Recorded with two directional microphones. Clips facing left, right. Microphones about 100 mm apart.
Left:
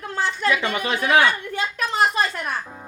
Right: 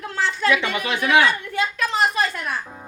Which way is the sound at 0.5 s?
40° left (ahead or behind).